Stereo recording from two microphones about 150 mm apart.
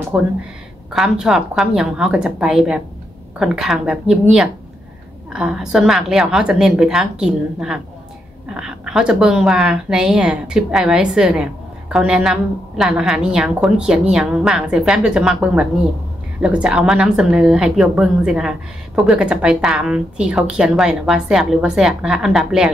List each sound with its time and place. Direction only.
0.1 s a woman's voice: 15° right (ahead or behind)